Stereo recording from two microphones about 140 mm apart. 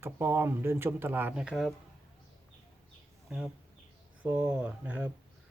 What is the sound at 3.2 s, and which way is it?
Speech, 5° right (ahead or behind).